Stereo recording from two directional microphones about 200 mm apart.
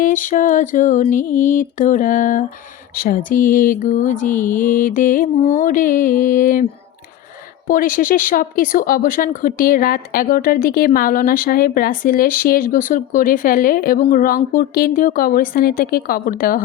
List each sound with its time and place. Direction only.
0.0 s mantra: 40° left (ahead or behind)
7.7 s speech: 45° left (ahead or behind)